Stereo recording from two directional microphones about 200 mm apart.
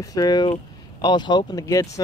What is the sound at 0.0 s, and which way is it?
Speech, 20° left (ahead or behind).